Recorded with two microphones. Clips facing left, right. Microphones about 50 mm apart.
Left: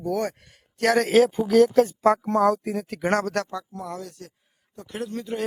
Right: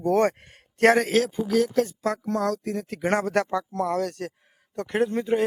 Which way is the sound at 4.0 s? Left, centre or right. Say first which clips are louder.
Right 10 dB; right.